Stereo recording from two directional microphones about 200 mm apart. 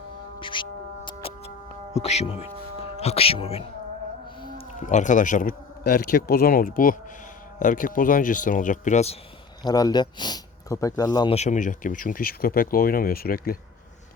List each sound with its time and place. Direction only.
0.3 s music: 25° left (ahead or behind)
1.9 s speech: 35° left (ahead or behind)
9.6 s speech: 20° left (ahead or behind)
11.3 s speech: 35° left (ahead or behind)